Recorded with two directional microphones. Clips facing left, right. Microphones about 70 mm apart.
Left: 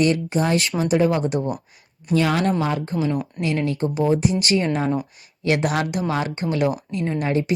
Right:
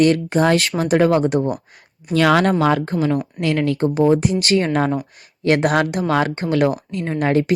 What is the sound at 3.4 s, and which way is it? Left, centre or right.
Speech, right.